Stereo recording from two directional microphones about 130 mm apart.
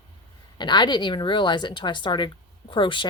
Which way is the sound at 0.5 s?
35° left (ahead or behind).